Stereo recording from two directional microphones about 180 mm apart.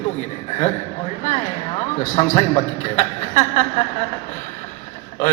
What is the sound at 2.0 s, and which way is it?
Speech, 40° left (ahead or behind).